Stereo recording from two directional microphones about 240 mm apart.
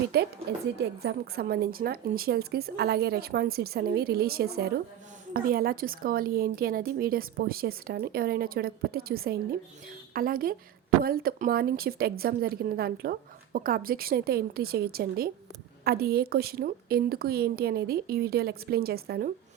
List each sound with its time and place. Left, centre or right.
0.1 s a woman's voice: right